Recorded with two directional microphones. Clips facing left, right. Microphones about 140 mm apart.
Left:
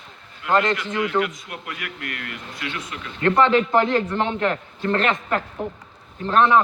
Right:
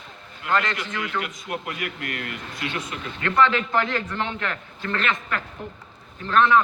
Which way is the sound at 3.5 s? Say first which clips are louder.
Left 6 dB; 25° left (ahead or behind).